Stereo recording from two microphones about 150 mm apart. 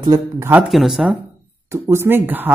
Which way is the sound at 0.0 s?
25° right (ahead or behind).